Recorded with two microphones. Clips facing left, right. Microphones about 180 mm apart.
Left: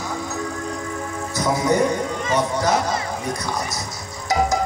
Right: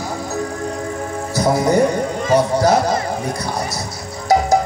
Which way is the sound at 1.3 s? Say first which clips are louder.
Right 4 dB; 30° right (ahead or behind).